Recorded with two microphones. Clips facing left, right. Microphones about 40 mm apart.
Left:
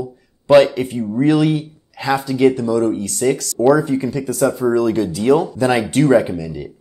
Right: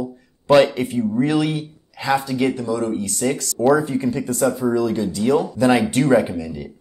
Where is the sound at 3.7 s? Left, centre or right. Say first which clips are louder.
Left 3 dB; left.